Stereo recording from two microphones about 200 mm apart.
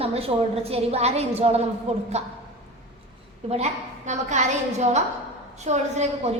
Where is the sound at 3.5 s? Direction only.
35° right (ahead or behind).